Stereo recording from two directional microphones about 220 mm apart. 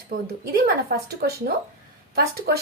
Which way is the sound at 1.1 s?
45° right (ahead or behind).